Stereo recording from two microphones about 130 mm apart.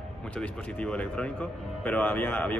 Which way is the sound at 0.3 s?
10° left (ahead or behind).